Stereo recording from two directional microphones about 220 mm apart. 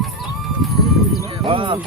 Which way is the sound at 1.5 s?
25° right (ahead or behind).